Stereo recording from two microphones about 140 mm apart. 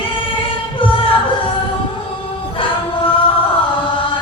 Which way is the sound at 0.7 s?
40° left (ahead or behind).